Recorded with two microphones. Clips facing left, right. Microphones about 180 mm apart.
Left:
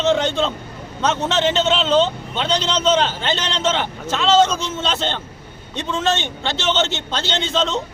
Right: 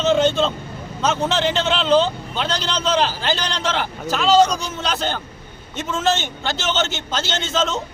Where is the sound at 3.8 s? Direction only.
Centre (ahead or behind).